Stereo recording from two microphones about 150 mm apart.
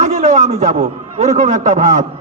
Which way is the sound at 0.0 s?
50° right (ahead or behind).